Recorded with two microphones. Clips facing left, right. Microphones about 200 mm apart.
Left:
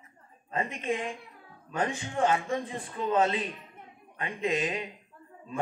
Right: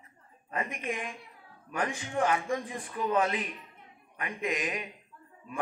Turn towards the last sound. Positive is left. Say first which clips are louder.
# left 3 dB
turn(degrees=25)  # may be behind; listen again after turning